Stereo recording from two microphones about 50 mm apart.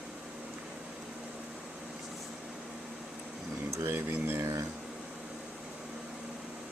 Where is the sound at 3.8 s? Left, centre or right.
Right.